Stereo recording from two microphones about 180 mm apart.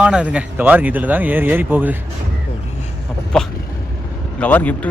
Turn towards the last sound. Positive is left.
turn(degrees=10)  # may be behind; listen again after turning